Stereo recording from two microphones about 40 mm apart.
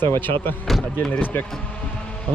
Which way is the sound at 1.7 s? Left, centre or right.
Left.